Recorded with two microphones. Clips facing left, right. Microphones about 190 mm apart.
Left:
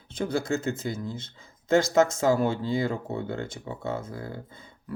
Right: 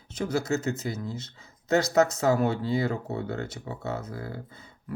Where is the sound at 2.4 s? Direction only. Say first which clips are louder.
Even; 25° left (ahead or behind).